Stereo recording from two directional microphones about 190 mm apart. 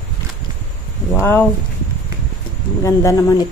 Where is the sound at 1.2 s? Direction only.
10° left (ahead or behind).